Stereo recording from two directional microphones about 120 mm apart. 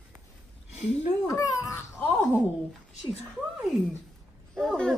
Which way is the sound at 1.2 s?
25° left (ahead or behind).